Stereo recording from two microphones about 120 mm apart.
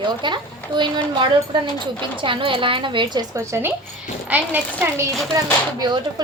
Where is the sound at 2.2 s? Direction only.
45° right (ahead or behind).